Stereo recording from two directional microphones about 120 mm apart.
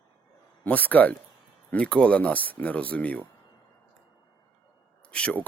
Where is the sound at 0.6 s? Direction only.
15° left (ahead or behind).